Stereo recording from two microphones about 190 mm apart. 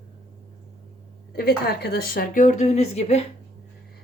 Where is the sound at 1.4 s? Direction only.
55° left (ahead or behind); by 3.2 s 35° left (ahead or behind).